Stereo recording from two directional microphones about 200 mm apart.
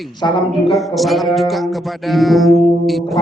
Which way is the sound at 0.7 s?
Centre (ahead or behind).